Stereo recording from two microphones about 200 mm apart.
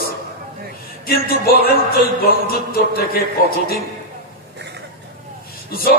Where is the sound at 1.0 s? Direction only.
50° left (ahead or behind).